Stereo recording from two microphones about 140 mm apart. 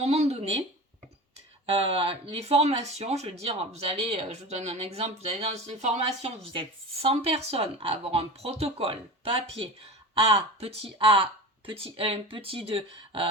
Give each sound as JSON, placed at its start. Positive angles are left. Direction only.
{"t": 0.0, "sound": "speech", "side_deg": -50}
{"t": 1.7, "sound": "speech", "side_deg": -45}